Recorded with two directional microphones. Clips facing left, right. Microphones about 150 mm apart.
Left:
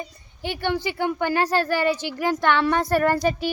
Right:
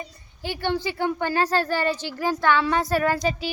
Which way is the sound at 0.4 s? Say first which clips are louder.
Left 1 dB; 15° left (ahead or behind).